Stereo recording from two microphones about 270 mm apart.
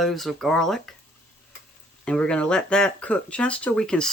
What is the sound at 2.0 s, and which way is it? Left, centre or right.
Speech, centre.